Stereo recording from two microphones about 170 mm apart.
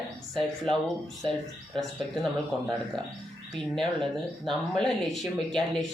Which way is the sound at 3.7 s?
Centre (ahead or behind).